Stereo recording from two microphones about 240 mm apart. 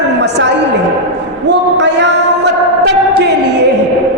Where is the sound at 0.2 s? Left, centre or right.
Right.